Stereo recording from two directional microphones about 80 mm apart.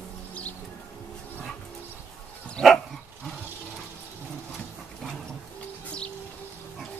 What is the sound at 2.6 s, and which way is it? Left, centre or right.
Dog, centre.